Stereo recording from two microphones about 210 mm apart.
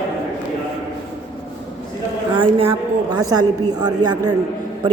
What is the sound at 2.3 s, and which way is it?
A woman's voice, 25° right (ahead or behind).